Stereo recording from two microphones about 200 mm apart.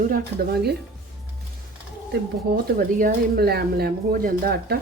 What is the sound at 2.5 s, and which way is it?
Speech, 45° right (ahead or behind).